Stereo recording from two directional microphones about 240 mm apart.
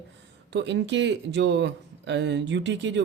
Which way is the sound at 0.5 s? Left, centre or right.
Right.